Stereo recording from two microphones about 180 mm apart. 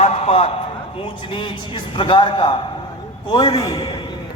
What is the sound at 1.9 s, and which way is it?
A man's voice, 30° left (ahead or behind).